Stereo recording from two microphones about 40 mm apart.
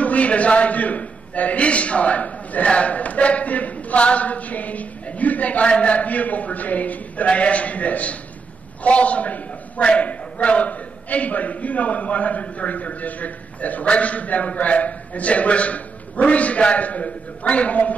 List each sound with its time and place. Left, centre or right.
0.0 s a man's voice: left